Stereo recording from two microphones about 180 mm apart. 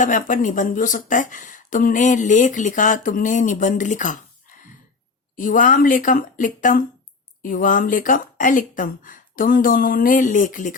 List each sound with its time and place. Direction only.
0.0 s speech: 45° left (ahead or behind)
5.4 s speech: 50° left (ahead or behind)